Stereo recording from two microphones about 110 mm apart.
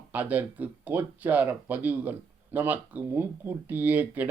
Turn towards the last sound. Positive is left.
turn(degrees=-15)  # may be behind; listen again after turning